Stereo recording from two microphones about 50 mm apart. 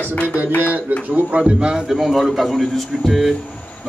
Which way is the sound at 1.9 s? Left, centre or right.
Centre.